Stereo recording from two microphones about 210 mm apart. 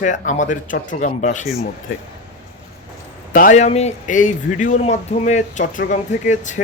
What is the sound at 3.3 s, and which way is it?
Speech, 35° left (ahead or behind).